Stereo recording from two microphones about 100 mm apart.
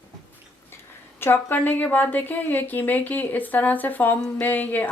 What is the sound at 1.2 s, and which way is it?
A woman's voice, 20° left (ahead or behind).